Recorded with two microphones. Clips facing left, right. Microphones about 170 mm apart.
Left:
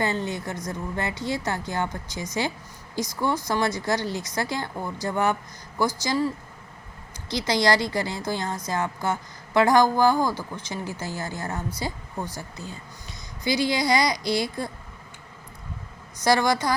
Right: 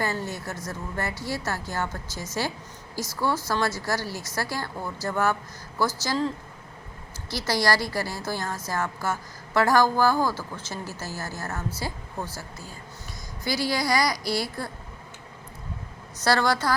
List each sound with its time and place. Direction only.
0.0 s a woman's voice: 20° left (ahead or behind)
16.2 s a woman's voice: 15° left (ahead or behind)